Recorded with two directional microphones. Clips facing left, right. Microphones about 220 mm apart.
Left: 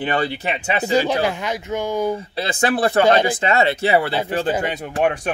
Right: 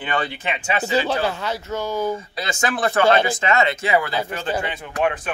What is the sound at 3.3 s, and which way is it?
Speech, 35° left (ahead or behind).